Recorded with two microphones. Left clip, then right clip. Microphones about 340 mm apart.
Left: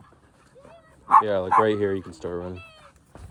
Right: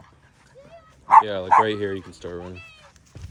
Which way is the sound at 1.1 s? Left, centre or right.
Right.